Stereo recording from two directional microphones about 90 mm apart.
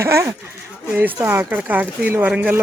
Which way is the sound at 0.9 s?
20° right (ahead or behind).